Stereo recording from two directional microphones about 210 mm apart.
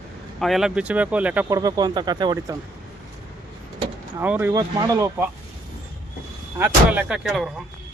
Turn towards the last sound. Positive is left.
turn(degrees=0)  # may be behind; listen again after turning